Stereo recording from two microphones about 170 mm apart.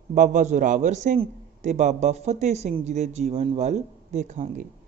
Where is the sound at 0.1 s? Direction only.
45° right (ahead or behind).